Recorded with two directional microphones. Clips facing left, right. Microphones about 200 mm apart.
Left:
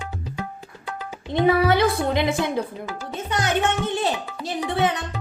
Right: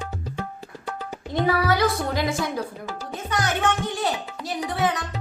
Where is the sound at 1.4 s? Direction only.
25° left (ahead or behind).